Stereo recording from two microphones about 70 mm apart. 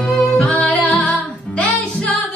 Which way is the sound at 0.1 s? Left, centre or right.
Centre.